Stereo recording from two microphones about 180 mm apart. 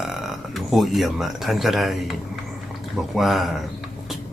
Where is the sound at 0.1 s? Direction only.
Centre (ahead or behind).